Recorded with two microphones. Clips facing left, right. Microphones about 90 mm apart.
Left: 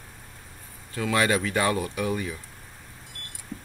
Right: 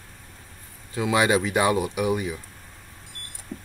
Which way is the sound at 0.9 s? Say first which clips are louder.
Right 3 dB; 15° right (ahead or behind).